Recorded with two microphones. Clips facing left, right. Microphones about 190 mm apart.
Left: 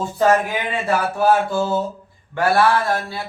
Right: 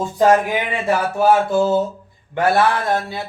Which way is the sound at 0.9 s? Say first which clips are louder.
Right 2 dB; 20° right (ahead or behind).